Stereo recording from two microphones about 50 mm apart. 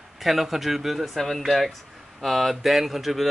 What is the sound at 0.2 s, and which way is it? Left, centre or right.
Speech, centre.